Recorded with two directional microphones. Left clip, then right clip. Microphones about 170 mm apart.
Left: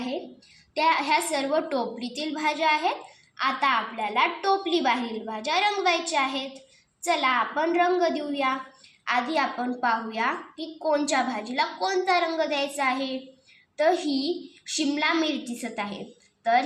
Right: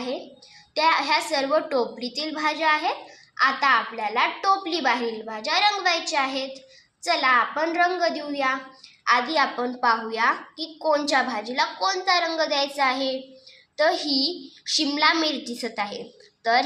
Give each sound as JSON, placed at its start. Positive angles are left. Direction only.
{"t": 0.8, "sound": "a woman's voice", "side_deg": -15}